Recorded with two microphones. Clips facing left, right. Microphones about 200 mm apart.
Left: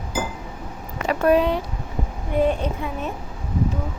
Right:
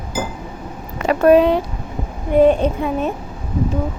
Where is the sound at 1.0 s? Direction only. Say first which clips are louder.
Right 6 dB; 85° right.